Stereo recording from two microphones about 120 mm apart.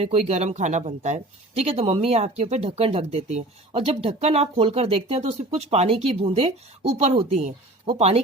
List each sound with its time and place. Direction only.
0.0 s speech: 60° right (ahead or behind)